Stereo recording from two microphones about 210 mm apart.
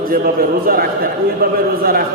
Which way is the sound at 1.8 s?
45° right (ahead or behind).